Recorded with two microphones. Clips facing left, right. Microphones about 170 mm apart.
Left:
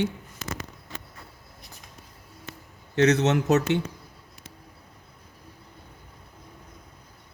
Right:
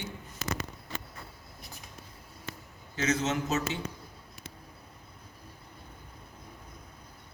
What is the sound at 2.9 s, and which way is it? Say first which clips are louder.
Speech: left 9 dB; 70° left (ahead or behind).